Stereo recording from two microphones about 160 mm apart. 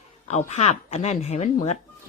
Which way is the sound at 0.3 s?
45° left (ahead or behind).